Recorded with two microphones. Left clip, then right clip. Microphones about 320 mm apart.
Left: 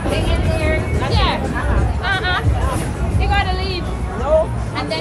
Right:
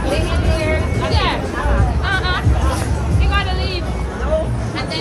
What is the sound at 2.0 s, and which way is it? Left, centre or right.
Music, left.